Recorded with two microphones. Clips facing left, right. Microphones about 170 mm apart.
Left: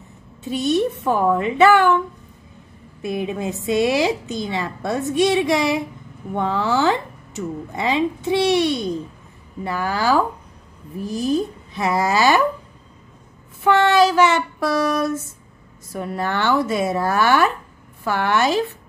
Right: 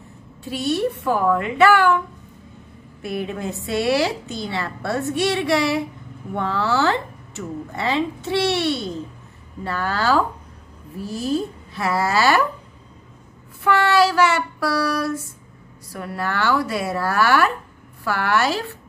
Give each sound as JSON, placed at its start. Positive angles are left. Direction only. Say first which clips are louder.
{"t": 0.4, "sound": "a woman's voice", "louder": "left 3 dB", "side_deg": 20}
{"t": 3.0, "sound": "speech", "louder": "left 2 dB", "side_deg": 15}
{"t": 13.7, "sound": "a woman's voice", "louder": "left 2 dB", "side_deg": 20}